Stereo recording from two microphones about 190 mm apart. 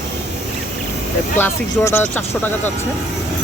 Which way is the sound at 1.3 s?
10° left (ahead or behind).